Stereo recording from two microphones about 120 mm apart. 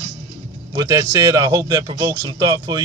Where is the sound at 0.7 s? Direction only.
30° right (ahead or behind).